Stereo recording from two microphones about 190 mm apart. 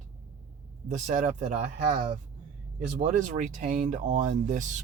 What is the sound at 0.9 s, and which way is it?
Speech, 40° right (ahead or behind).